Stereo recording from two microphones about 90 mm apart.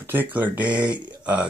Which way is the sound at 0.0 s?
20° right (ahead or behind).